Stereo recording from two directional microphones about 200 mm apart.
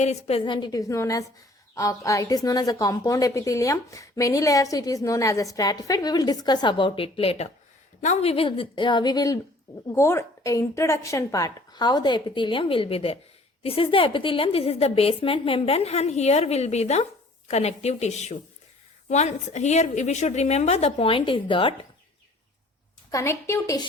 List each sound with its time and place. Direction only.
0.0 s a woman's voice: 35° left (ahead or behind)
23.1 s a woman's voice: 15° left (ahead or behind)